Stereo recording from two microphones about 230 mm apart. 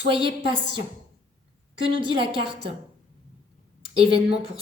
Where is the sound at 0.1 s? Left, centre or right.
Right.